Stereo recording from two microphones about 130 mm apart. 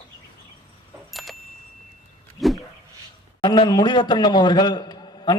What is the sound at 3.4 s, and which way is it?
A man's voice, 35° left (ahead or behind).